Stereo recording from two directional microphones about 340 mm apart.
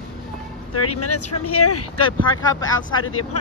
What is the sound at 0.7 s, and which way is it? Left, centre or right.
Speech, left.